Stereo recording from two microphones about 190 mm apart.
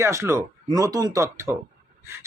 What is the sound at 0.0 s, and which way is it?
A man's voice, 15° right (ahead or behind).